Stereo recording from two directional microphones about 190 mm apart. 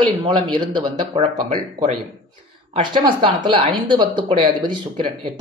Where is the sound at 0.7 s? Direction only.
30° right (ahead or behind).